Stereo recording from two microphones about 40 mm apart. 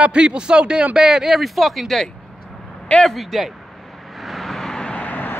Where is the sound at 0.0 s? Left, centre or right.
Right; by 2.0 s centre.